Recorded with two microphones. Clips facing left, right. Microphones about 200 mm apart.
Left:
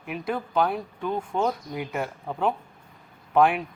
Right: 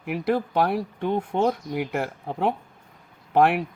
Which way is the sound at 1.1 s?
25° right (ahead or behind).